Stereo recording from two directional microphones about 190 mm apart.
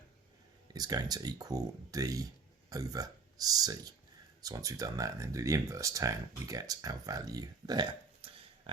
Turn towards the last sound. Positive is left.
turn(degrees=-20)  # may be behind; listen again after turning